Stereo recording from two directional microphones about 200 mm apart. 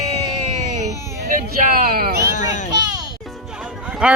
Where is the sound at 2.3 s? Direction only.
40° left (ahead or behind).